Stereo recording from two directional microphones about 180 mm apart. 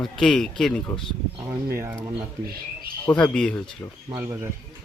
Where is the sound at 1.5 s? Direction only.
15° right (ahead or behind).